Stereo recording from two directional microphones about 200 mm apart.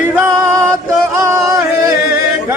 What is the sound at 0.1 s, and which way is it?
Music, 10° right (ahead or behind).